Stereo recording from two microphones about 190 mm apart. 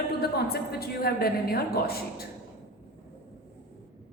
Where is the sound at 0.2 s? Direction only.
55° left (ahead or behind).